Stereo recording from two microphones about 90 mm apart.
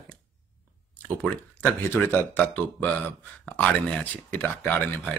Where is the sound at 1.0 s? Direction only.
15° left (ahead or behind).